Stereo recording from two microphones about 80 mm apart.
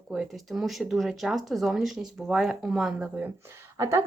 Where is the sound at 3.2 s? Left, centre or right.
Right.